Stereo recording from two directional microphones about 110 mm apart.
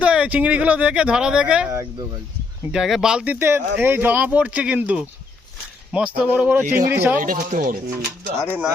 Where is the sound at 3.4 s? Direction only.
20° right (ahead or behind).